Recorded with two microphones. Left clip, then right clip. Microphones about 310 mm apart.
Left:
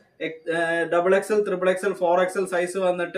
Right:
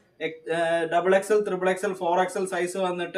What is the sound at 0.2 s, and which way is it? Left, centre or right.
Speech, centre.